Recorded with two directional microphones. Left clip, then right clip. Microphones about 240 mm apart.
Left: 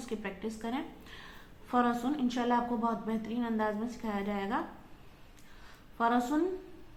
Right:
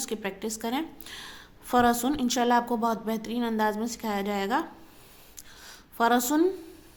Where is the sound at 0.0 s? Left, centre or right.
Right.